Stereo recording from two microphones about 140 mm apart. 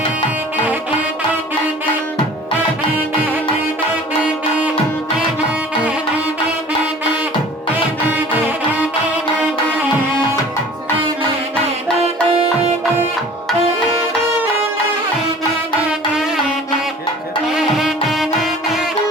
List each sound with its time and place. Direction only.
5.4 s music: 10° right (ahead or behind)
8.7 s music: 10° right (ahead or behind)
11.9 s music: 45° right (ahead or behind)
17.4 s music: 5° right (ahead or behind)